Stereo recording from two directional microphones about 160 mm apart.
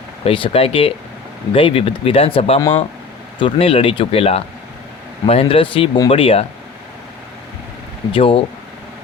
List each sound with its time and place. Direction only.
0.3 s speech: 35° left (ahead or behind)
8.1 s speech: 35° left (ahead or behind)